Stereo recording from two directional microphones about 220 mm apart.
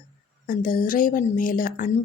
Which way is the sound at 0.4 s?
40° left (ahead or behind).